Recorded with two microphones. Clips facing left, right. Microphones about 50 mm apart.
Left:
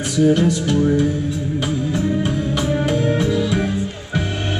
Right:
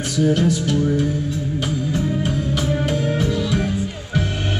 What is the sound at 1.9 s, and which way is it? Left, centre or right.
Music, centre.